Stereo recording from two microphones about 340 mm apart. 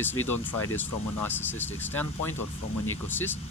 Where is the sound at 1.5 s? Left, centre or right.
Centre.